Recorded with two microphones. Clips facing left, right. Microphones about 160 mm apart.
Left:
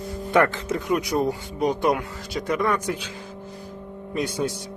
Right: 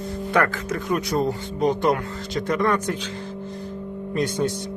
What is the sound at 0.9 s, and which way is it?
Speech, 15° left (ahead or behind).